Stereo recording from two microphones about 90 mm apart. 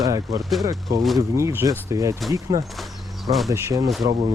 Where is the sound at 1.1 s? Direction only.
35° right (ahead or behind).